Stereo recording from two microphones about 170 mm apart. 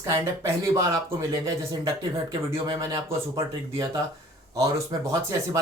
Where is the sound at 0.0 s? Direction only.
15° right (ahead or behind).